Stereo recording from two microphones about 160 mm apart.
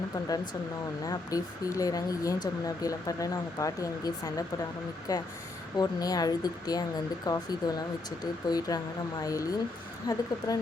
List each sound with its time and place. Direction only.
1.0 s speech: 20° left (ahead or behind)